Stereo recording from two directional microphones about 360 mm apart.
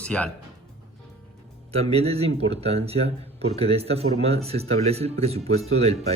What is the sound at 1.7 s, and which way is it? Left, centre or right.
Speech, centre.